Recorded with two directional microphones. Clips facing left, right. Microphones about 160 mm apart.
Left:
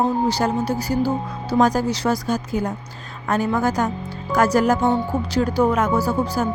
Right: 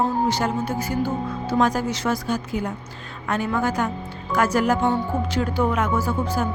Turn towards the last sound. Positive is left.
turn(degrees=35)  # may be behind; listen again after turning